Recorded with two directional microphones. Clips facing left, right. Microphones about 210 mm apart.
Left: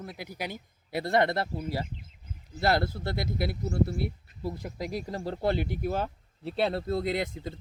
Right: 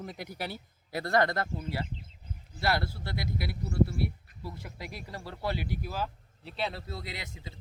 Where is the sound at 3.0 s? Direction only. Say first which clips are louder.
Left 5 dB; 50° left (ahead or behind).